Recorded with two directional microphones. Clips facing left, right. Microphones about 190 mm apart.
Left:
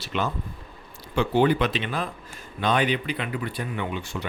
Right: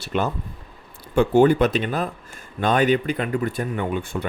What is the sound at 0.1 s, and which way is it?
Speech, 45° right (ahead or behind).